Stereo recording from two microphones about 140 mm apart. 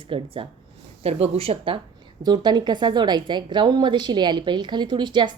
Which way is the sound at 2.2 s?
30° right (ahead or behind).